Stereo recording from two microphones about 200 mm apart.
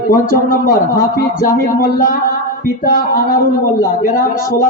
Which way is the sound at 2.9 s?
45° left (ahead or behind).